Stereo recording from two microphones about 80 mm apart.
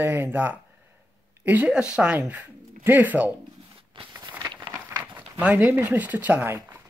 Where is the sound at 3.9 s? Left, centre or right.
Right.